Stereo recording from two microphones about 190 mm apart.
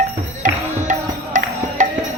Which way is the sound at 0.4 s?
40° right (ahead or behind).